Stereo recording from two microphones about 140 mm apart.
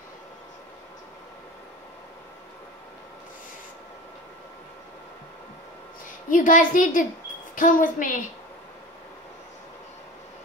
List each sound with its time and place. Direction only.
6.3 s a woman's voice: 70° left (ahead or behind)